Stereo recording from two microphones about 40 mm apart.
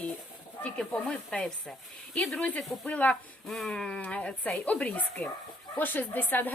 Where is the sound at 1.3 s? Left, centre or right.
Left.